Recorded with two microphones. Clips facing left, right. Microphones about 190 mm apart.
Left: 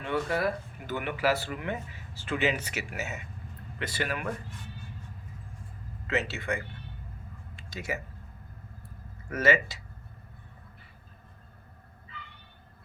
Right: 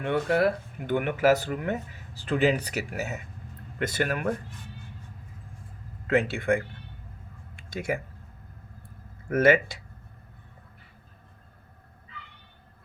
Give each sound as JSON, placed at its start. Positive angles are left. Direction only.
{"t": 0.0, "sound": "speech", "side_deg": -60}
{"t": 6.1, "sound": "speech", "side_deg": -50}
{"t": 7.5, "sound": "a sound", "side_deg": -50}
{"t": 9.3, "sound": "speech", "side_deg": -55}